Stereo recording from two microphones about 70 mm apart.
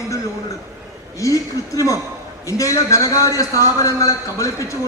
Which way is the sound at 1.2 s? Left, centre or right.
Left.